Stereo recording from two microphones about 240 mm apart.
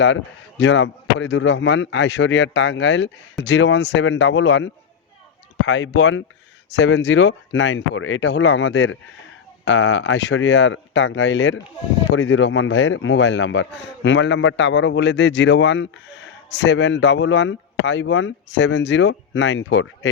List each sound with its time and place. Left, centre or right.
0.0 s a man's voice: left